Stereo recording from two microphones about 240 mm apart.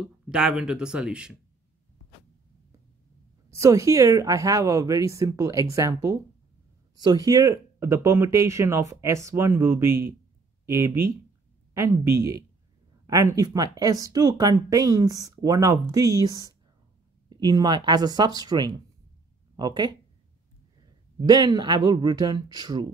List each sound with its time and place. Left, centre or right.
0.0 s speech: centre
3.4 s speech: centre
21.2 s speech: centre